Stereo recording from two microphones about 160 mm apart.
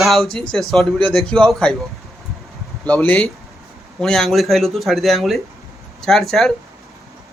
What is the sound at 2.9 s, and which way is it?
A man's voice, 10° left (ahead or behind).